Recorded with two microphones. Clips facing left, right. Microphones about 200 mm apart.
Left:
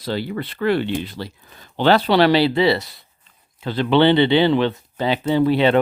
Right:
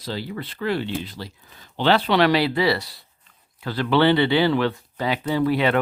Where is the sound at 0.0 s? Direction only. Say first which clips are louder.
Left 5 dB; 65° left (ahead or behind).